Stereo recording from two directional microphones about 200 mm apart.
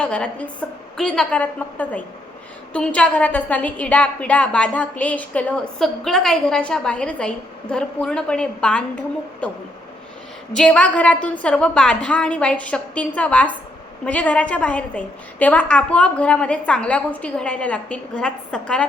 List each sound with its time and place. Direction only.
0.0 s a woman's voice: 5° left (ahead or behind)
10.5 s a woman's voice: 5° left (ahead or behind)